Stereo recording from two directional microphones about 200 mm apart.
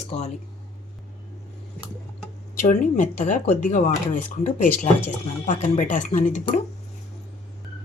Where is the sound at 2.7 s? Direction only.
40° left (ahead or behind).